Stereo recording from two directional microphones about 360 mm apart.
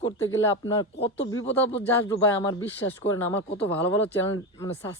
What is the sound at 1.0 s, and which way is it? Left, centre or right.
Speech, left.